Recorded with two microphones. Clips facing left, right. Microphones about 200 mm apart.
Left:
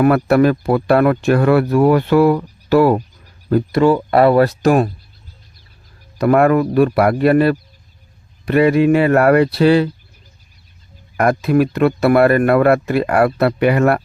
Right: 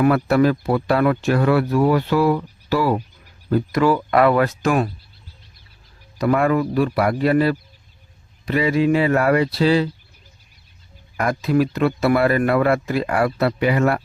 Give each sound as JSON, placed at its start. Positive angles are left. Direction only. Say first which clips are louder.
{"t": 0.0, "sound": "speech", "louder": "left 4 dB", "side_deg": 55}
{"t": 3.7, "sound": "speech", "louder": "left 4 dB", "side_deg": 30}
{"t": 6.1, "sound": "speech", "louder": "left 5 dB", "side_deg": 55}
{"t": 11.2, "sound": "speech", "louder": "left 5 dB", "side_deg": 60}